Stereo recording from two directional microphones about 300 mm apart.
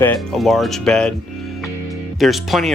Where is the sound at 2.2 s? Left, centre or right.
Centre.